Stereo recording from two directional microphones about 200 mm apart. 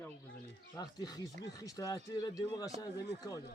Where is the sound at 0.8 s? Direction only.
20° left (ahead or behind).